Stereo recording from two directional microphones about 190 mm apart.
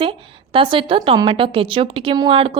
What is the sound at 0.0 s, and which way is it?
A woman's voice, 25° right (ahead or behind).